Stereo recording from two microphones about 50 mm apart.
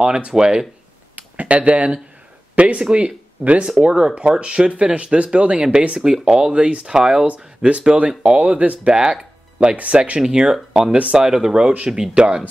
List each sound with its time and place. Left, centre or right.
0.0 s speech: centre
1.1 s speech: right
10.2 s speech: centre
11.2 s speech: centre